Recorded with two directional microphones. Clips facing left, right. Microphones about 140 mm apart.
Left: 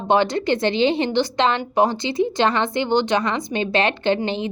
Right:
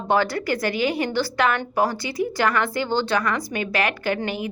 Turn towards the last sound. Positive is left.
turn(degrees=25)  # may be behind; listen again after turning